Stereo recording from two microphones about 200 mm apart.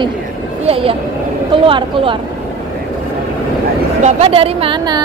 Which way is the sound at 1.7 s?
25° right (ahead or behind).